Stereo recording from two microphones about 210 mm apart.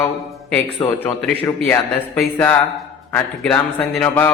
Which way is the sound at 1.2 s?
10° left (ahead or behind).